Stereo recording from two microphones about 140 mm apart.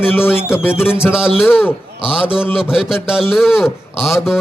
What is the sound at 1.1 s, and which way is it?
A man's voice, 5° right (ahead or behind).